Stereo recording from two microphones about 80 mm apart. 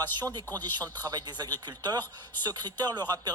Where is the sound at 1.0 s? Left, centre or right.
Right.